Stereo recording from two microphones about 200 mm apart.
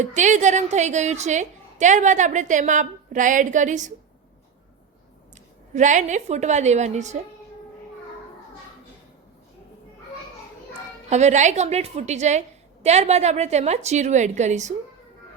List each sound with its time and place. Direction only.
0.0 s a woman's voice: 35° right (ahead or behind)
5.7 s a woman's voice: 35° right (ahead or behind)
11.1 s a woman's voice: 35° right (ahead or behind)